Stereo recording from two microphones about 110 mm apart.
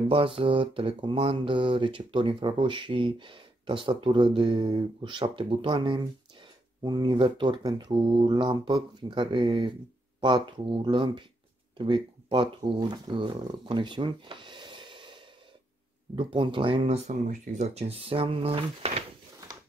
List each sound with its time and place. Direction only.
0.1 s speech: 55° right (ahead or behind)
16.8 s speech: 80° right; by 19.0 s 65° right (ahead or behind)